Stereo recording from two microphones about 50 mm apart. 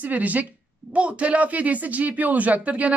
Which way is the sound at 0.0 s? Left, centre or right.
Right.